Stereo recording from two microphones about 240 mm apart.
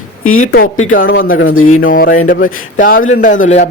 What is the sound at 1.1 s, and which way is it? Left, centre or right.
Speech, left.